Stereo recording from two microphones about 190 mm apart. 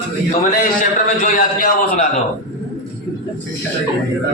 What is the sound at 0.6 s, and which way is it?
A man's voice, 45° left (ahead or behind).